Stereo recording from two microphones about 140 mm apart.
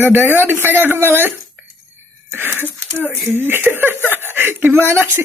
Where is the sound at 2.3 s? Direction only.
15° right (ahead or behind).